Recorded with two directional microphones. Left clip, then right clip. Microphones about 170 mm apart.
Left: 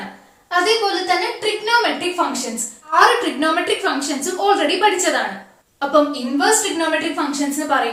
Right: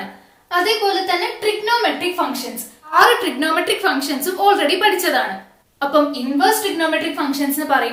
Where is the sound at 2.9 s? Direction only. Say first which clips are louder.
Right 1 dB; 15° right (ahead or behind).